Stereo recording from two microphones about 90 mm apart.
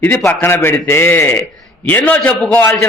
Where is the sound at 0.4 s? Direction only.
25° left (ahead or behind).